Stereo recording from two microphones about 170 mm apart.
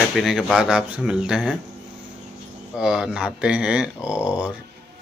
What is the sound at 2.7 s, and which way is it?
Speech, 5° right (ahead or behind).